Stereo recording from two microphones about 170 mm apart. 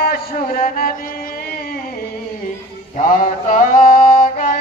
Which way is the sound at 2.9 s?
50° left (ahead or behind).